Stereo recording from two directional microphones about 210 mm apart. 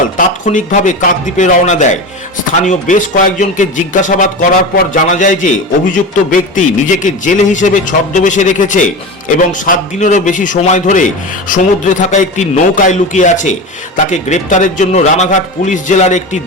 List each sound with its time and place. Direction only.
0.4 s speech: 35° left (ahead or behind)